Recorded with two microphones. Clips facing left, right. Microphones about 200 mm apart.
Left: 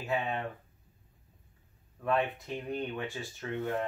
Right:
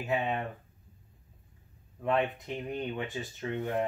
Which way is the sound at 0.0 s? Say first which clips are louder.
Right 2 dB; 20° right (ahead or behind).